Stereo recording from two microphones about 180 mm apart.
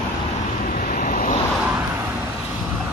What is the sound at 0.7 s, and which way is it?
Vehicle, 55° left (ahead or behind).